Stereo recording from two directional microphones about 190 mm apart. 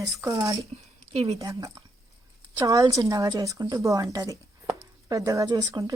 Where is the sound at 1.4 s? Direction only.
20° right (ahead or behind).